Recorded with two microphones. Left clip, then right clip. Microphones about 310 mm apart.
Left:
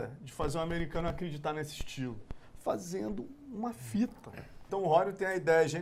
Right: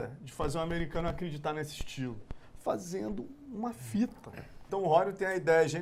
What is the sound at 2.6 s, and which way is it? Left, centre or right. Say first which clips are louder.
Speech: right 1 dB; centre.